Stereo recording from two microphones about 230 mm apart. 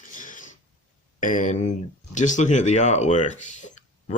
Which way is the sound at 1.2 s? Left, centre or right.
Left.